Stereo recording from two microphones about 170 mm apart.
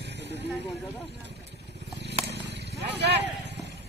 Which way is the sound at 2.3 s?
85° right.